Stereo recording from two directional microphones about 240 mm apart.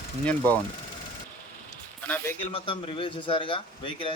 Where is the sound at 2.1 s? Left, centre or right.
Centre.